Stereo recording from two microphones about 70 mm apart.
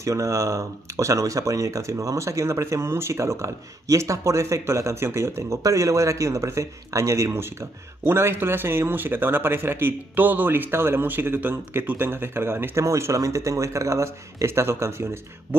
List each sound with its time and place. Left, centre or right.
0.0 s speech: right
12.7 s speech: right